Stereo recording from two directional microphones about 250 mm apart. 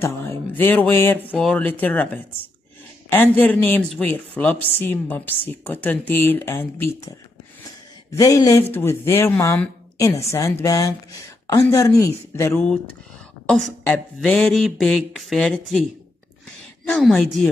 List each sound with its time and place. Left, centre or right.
0.0 s mantra: centre
1.3 s speech: centre
16.9 s speech: centre